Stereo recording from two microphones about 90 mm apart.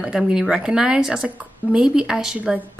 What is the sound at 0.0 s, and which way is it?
A woman's voice, 5° right (ahead or behind).